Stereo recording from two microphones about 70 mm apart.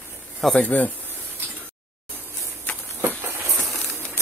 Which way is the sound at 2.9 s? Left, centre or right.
Right.